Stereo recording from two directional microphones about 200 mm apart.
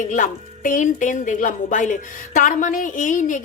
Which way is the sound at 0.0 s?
40° left (ahead or behind).